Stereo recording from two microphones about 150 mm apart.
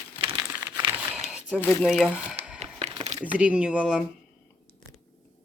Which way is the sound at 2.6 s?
50° right (ahead or behind).